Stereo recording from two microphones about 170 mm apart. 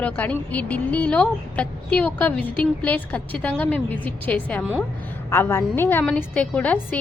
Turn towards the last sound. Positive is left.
turn(degrees=10)  # may be behind; listen again after turning